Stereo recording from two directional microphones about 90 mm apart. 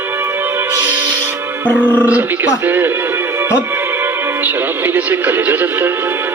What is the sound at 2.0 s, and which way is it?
Speech, 20° right (ahead or behind).